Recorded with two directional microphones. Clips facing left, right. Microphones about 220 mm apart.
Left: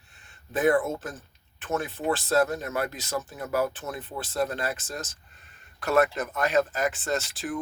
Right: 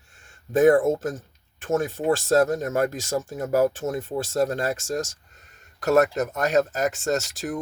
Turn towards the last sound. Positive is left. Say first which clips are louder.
# right 4 dB
turn(degrees=-40)  # may be behind; listen again after turning